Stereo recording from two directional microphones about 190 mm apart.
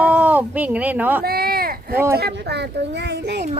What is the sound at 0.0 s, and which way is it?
Speech, 10° right (ahead or behind).